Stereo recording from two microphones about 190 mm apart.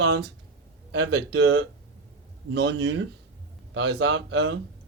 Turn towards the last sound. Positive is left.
turn(degrees=-80)